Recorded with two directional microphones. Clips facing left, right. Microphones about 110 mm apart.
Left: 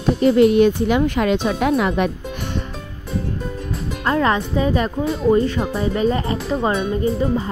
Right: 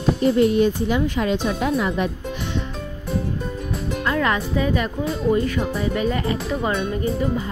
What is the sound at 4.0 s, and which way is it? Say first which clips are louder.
Speech: left 4 dB; 35° left (ahead or behind).